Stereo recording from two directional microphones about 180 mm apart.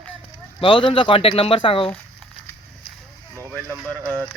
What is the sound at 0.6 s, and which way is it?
Speech, 30° left (ahead or behind).